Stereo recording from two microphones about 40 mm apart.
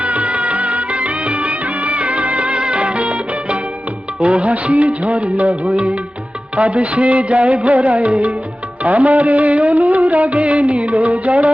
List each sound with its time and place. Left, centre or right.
0.0 s music of bollywood: right
4.2 s music: right